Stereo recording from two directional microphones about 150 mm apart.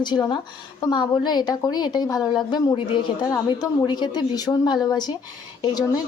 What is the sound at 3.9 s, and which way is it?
A woman's voice, 30° left (ahead or behind).